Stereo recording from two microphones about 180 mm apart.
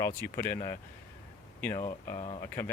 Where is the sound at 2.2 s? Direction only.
30° left (ahead or behind).